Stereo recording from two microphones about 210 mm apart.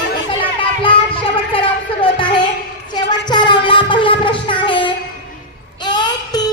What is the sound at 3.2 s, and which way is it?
Music, 20° left (ahead or behind).